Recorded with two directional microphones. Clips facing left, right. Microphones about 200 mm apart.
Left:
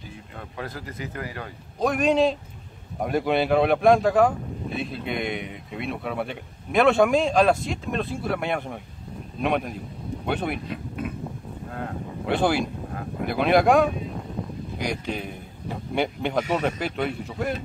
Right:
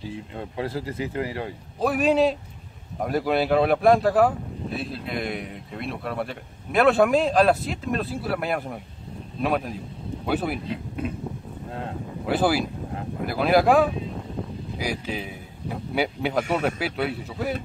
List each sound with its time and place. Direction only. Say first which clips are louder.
0.1 s speech: right 6 dB; 25° right (ahead or behind)
1.8 s speech: even; 5° right (ahead or behind)
12.3 s speech: even; 5° right (ahead or behind)